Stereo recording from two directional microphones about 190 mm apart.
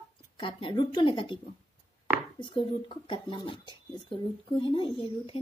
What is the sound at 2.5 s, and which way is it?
A woman's voice, 25° left (ahead or behind).